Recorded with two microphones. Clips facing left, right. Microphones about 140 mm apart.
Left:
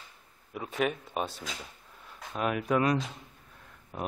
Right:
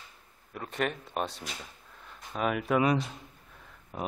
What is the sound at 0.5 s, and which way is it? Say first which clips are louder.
A man's voice: left 2 dB; 5° left (ahead or behind).